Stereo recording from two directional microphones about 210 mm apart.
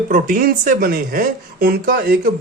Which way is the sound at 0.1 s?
40° right (ahead or behind).